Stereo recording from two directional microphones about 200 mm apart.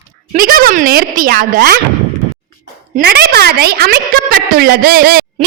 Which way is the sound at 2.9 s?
50° right (ahead or behind).